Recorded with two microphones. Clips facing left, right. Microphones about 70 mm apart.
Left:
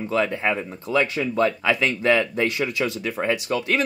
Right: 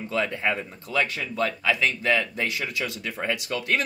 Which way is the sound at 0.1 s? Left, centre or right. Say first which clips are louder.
Left 3 dB; centre.